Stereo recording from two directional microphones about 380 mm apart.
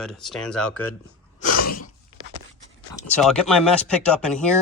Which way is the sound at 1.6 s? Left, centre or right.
Left.